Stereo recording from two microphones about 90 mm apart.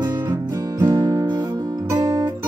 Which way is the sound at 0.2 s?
40° right (ahead or behind).